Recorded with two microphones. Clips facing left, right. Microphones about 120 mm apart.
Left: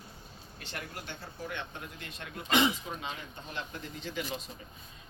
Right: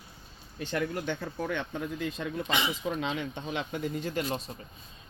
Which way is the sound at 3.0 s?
90° right.